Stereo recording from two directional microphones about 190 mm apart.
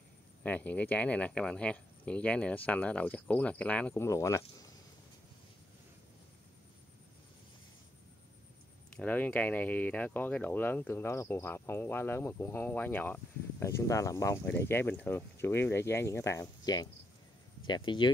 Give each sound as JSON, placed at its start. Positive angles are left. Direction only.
{"t": 0.4, "sound": "speech", "side_deg": 10}
{"t": 8.9, "sound": "speech", "side_deg": 10}